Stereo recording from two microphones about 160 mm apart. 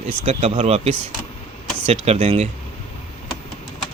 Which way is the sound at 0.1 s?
40° right (ahead or behind).